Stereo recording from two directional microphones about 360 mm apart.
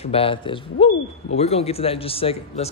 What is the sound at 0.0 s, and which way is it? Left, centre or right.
Speech, centre.